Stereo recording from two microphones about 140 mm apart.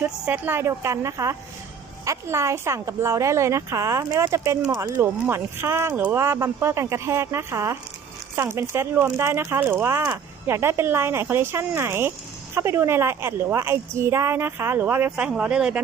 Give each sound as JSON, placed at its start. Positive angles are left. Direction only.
{"t": 0.0, "sound": "speech", "side_deg": -10}